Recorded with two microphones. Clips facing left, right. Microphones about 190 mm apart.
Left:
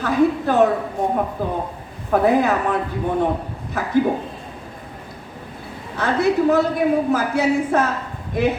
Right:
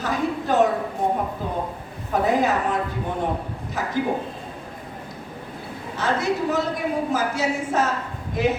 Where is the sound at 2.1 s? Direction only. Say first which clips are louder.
Left 6 dB; 60° left (ahead or behind).